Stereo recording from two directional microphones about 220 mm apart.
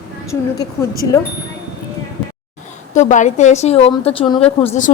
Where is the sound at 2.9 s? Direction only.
35° left (ahead or behind).